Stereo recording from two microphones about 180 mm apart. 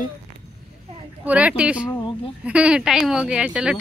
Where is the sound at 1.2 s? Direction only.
5° right (ahead or behind).